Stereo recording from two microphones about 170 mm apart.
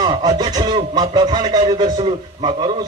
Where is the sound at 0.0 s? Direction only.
25° right (ahead or behind).